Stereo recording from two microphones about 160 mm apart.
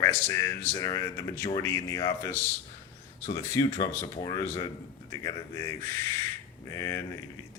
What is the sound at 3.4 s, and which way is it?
Speech, 20° left (ahead or behind).